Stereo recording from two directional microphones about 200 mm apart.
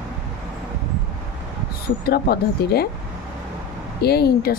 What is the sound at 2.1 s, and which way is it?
Speech, 50° left (ahead or behind).